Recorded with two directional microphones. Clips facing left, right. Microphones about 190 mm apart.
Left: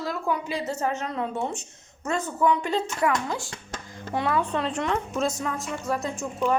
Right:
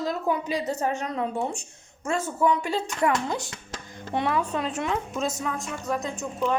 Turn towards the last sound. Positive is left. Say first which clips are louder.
# left 1 dB
turn(degrees=0)  # may be behind; listen again after turning